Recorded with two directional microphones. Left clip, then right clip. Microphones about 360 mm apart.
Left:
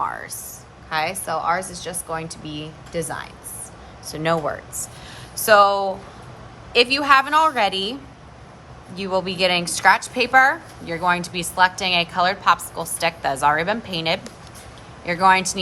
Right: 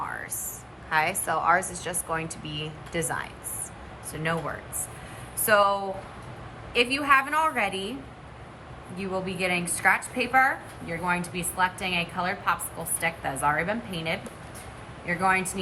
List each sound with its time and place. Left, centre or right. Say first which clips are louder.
0.9 s a woman's voice: left 2 dB; centre
9.0 s a woman's voice: left 9 dB; centre